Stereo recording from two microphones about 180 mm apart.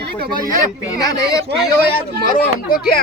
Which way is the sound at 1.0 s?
20° left (ahead or behind).